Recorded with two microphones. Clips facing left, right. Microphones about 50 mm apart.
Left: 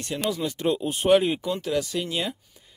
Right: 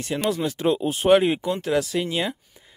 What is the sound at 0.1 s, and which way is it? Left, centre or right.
Speech, right.